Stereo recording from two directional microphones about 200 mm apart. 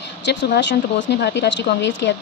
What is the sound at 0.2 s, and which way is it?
Speech, 60° left (ahead or behind).